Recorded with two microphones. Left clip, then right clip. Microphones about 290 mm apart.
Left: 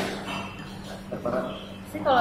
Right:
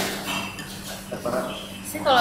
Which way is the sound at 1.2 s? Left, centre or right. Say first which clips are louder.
Right 2 dB; centre.